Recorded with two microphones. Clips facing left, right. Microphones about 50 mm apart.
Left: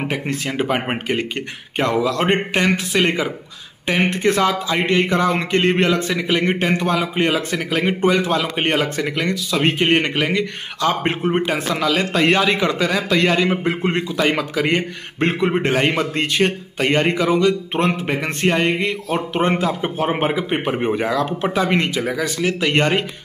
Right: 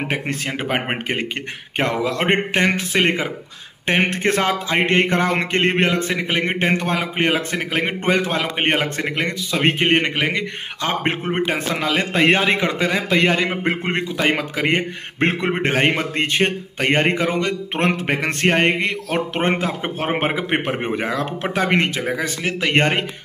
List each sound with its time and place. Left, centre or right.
0.1 s speech: right
20.8 s speech: right